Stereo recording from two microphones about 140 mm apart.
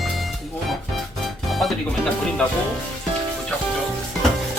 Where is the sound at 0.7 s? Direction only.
Centre (ahead or behind).